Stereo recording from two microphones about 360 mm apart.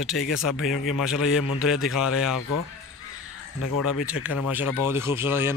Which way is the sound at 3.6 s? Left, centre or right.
Left.